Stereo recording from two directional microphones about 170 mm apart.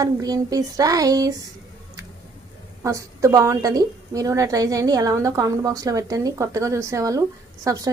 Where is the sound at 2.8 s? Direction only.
20° right (ahead or behind).